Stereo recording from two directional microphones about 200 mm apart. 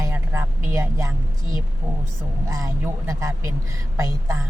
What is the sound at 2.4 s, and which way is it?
Speech, 15° right (ahead or behind).